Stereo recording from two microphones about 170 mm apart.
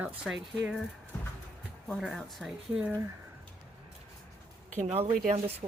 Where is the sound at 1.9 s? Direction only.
Centre (ahead or behind).